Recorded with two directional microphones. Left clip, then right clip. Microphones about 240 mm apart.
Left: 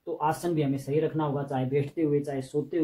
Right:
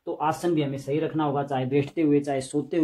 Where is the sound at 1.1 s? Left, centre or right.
Right.